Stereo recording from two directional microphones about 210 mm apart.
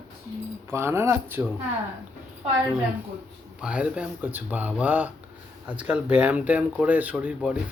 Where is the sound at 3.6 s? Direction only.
5° right (ahead or behind).